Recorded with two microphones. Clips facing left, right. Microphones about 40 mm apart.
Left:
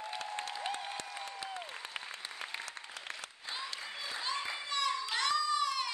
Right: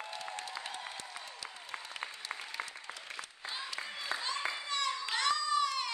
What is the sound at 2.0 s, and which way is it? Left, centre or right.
Applause, left.